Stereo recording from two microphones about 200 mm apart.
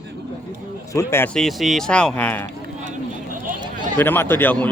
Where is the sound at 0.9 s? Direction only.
15° left (ahead or behind).